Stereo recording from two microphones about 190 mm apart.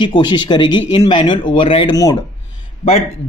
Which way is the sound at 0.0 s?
25° left (ahead or behind).